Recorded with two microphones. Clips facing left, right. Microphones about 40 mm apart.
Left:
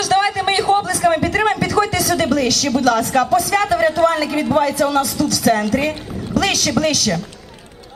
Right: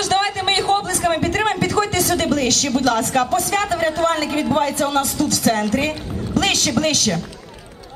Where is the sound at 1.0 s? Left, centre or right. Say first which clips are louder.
Left 4 dB; left.